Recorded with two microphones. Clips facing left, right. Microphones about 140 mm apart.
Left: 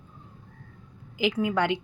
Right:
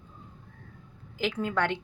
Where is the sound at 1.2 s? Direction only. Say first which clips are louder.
Left 3 dB; 10° left (ahead or behind).